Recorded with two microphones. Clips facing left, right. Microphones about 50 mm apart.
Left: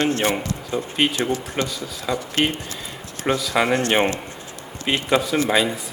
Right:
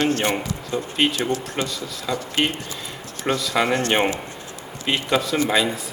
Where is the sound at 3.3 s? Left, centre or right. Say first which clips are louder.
Left 1 dB; centre.